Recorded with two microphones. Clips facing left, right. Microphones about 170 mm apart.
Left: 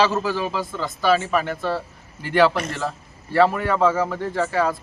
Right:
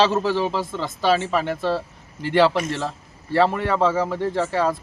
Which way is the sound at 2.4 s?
20° right (ahead or behind).